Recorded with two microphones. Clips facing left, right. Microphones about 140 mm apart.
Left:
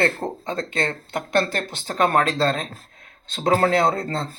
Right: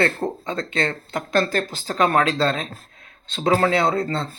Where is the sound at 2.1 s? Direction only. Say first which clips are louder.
Even; 40° left (ahead or behind).